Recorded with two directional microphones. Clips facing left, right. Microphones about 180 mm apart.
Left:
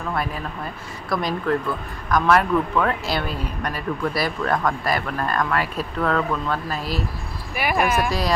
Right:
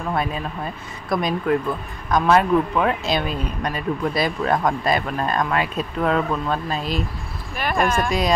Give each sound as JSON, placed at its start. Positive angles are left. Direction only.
{"t": 0.1, "sound": "speech", "side_deg": -20}
{"t": 7.5, "sound": "speech", "side_deg": 10}
{"t": 8.1, "sound": "speech", "side_deg": -20}